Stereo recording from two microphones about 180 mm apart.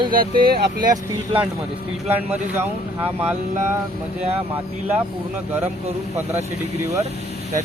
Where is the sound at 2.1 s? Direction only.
10° right (ahead or behind).